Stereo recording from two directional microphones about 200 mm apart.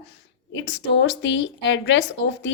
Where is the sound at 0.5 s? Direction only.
60° left (ahead or behind).